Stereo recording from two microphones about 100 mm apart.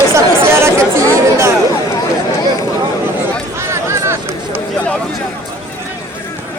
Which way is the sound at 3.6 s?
30° right (ahead or behind).